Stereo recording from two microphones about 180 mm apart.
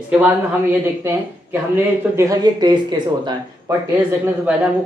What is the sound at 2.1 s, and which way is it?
Speech, 20° right (ahead or behind).